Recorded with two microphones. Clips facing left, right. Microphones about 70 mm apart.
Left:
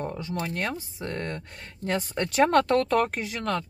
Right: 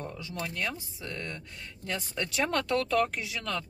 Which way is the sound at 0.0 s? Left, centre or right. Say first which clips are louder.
Left 6 dB; left.